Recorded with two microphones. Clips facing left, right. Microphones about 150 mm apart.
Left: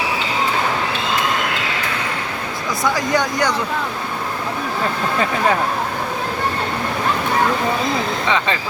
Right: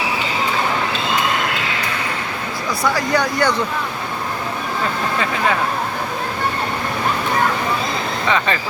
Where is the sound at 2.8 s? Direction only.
20° left (ahead or behind).